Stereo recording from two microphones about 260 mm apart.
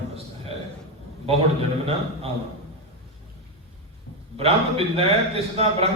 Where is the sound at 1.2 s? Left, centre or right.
Right.